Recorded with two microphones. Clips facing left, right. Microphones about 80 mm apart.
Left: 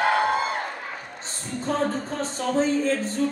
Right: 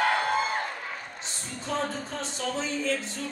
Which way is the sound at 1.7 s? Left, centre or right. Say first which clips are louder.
Left 5 dB; left.